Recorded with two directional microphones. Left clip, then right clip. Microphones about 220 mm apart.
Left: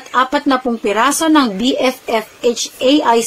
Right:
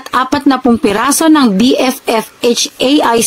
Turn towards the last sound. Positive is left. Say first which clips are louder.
# right 2 dB
turn(degrees=-40)  # may be behind; listen again after turning